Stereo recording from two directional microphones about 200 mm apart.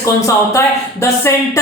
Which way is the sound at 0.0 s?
15° left (ahead or behind).